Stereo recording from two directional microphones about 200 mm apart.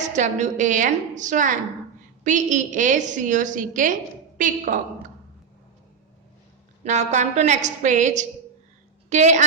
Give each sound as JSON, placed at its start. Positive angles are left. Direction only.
{"t": 0.0, "sound": "a woman's voice", "side_deg": -35}
{"t": 6.8, "sound": "a woman's voice", "side_deg": -35}